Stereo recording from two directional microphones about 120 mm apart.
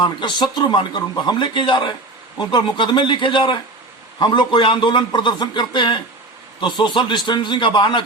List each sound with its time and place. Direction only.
0.0 s speech: 40° left (ahead or behind)